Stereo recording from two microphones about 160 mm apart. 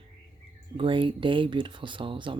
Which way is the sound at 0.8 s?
30° right (ahead or behind).